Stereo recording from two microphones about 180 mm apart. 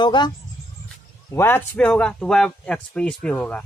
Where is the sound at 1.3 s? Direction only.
10° left (ahead or behind).